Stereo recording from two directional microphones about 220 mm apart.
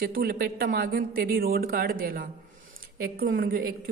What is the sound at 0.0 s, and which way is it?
A woman's voice, 45° right (ahead or behind).